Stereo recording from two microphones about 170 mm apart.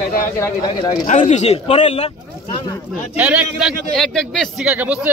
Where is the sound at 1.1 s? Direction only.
45° left (ahead or behind).